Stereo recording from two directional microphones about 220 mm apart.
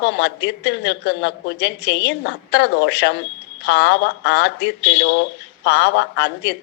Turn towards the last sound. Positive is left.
turn(degrees=50)  # may be behind; listen again after turning